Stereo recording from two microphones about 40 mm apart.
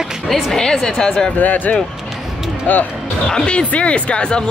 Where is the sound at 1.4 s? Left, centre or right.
Left.